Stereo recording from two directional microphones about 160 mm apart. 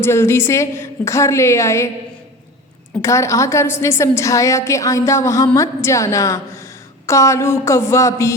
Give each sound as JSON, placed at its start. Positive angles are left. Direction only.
{"t": 0.0, "sound": "a woman's voice", "side_deg": 15}
{"t": 3.0, "sound": "a woman's voice", "side_deg": 20}